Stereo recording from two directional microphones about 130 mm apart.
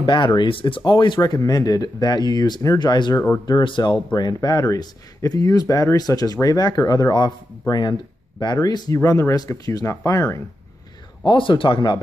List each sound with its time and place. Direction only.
0.0 s speech: 35° left (ahead or behind)
11.2 s speech: 40° left (ahead or behind)